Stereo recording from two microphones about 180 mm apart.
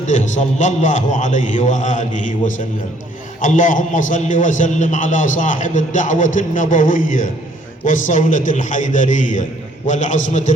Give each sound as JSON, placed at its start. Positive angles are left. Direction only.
{"t": 0.1, "sound": "a man's voice", "side_deg": 45}